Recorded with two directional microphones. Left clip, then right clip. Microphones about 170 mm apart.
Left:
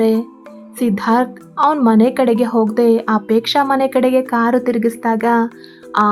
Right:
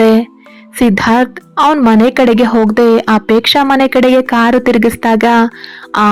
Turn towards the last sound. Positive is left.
turn(degrees=-30)  # may be behind; listen again after turning